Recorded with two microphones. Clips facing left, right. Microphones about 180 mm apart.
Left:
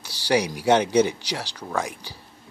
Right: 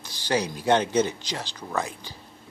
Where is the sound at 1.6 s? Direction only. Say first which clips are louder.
Left 1 dB; 5° right (ahead or behind).